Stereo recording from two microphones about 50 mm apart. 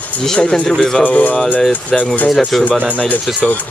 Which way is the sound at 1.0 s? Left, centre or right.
Left.